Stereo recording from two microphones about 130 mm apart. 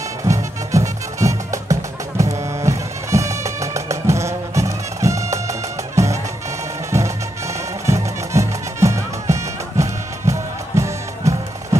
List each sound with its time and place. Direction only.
0.3 s music: 25° right (ahead or behind)